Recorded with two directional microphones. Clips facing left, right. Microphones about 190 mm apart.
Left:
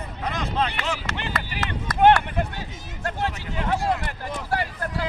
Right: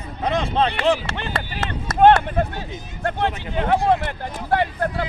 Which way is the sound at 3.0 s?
55° right (ahead or behind).